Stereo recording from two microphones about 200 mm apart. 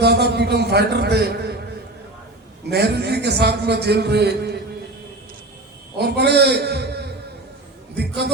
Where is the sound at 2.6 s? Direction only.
55° right (ahead or behind).